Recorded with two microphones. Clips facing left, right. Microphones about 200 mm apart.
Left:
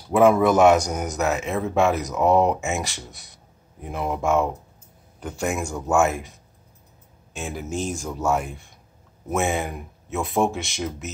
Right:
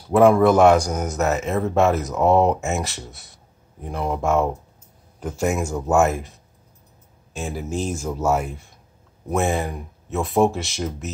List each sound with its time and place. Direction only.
0.1 s speech: centre (ahead or behind)
7.4 s speech: centre (ahead or behind)